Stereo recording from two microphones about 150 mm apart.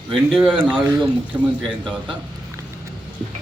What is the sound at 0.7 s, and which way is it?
Speech, 20° right (ahead or behind).